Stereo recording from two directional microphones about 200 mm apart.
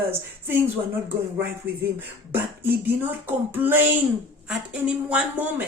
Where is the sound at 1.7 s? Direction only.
10° right (ahead or behind).